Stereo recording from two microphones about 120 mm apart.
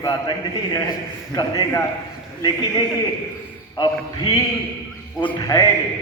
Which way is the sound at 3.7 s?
40° left (ahead or behind).